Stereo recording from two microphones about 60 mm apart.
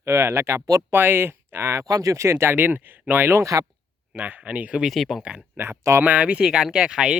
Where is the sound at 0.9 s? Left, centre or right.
Right.